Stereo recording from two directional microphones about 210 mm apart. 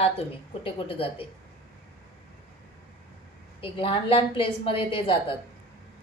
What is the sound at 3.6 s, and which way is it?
A woman's voice, 25° left (ahead or behind).